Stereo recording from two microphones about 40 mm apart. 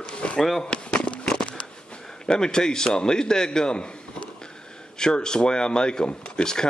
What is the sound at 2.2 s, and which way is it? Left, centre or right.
Speech, centre.